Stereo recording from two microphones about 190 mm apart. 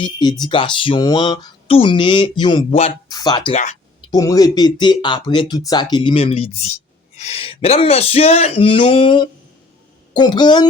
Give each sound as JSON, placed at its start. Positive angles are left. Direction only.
{"t": 0.0, "sound": "speech", "side_deg": 20}
{"t": 3.1, "sound": "speech", "side_deg": 20}
{"t": 3.5, "sound": "speech", "side_deg": 40}
{"t": 4.1, "sound": "speech", "side_deg": 20}